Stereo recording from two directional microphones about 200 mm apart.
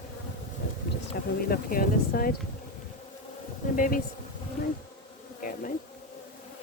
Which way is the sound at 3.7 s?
45° left (ahead or behind).